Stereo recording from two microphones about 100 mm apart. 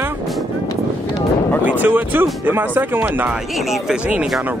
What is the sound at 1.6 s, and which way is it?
Speech, 20° right (ahead or behind).